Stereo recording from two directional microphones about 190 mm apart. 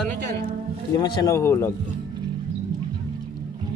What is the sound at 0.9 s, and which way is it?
Speech, 20° left (ahead or behind).